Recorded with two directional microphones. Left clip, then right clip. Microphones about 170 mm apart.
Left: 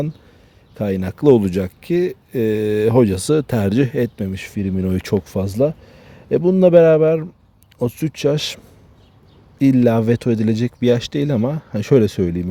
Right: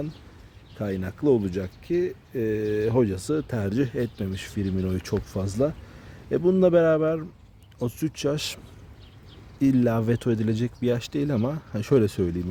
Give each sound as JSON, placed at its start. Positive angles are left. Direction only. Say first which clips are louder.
{"t": 0.8, "sound": "speech", "louder": "left 8 dB", "side_deg": 50}